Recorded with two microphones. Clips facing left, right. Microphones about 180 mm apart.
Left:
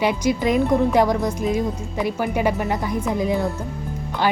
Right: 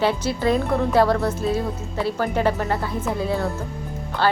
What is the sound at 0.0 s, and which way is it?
A woman's voice, 15° left (ahead or behind).